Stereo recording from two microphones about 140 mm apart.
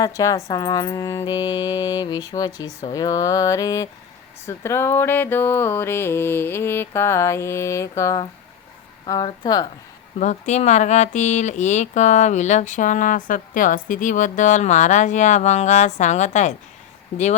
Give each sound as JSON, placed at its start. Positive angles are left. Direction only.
{"t": 0.0, "sound": "speech", "side_deg": 25}
{"t": 4.4, "sound": "mantra", "side_deg": 20}
{"t": 9.0, "sound": "speech", "side_deg": 30}
{"t": 10.2, "sound": "speech", "side_deg": 55}